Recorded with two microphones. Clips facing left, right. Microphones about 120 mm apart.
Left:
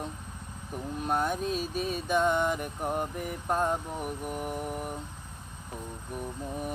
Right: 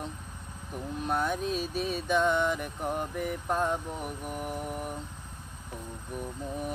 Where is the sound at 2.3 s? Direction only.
45° left (ahead or behind).